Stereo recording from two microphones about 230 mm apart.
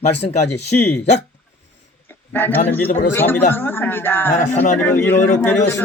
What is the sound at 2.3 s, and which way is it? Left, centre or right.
Speech, centre.